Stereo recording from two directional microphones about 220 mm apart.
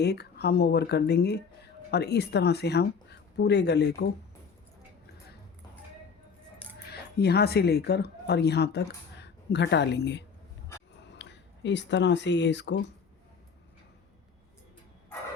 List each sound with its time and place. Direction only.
0.0 s speech: 50° left (ahead or behind)
6.9 s speech: 45° left (ahead or behind)